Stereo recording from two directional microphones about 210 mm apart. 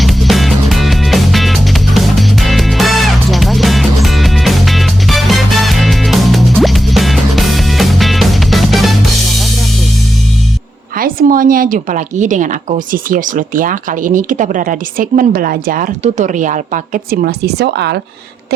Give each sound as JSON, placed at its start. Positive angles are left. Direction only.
{"t": 0.0, "sound": "music", "side_deg": 0}
{"t": 10.9, "sound": "speech", "side_deg": -40}